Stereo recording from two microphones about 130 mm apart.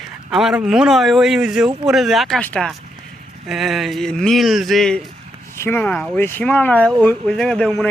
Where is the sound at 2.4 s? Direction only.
10° left (ahead or behind).